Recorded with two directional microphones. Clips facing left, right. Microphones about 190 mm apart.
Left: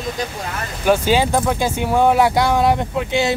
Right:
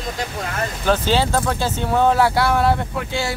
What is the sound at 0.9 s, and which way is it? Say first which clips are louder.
Speech: left 3 dB; 15° left (ahead or behind).